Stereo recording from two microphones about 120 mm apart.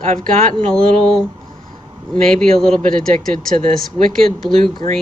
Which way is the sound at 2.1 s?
5° left (ahead or behind).